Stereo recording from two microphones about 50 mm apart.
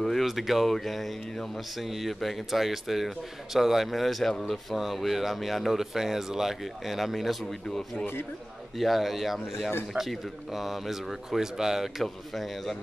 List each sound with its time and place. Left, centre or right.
0.0 s speech: centre
1.8 s speech: centre
8.0 s speech: left
8.7 s speech: centre